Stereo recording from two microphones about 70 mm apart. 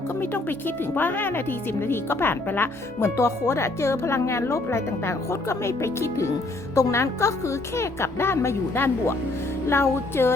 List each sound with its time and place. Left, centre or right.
0.2 s speech: left